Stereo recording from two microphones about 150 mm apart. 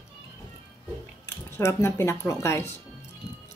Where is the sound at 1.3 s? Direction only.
15° left (ahead or behind).